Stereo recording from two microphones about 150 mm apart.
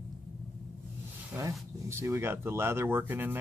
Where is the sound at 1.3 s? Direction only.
10° right (ahead or behind).